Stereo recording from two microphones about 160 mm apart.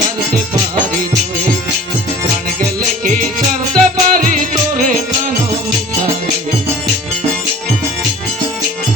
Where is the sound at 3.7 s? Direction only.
60° right (ahead or behind).